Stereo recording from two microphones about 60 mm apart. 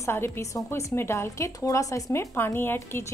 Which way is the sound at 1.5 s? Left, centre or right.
Left.